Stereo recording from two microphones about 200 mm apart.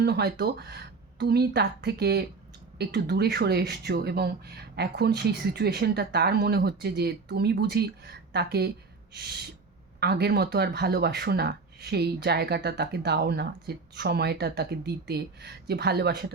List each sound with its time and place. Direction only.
0.0 s speech: 55° right (ahead or behind)
10.0 s speech: 55° right (ahead or behind)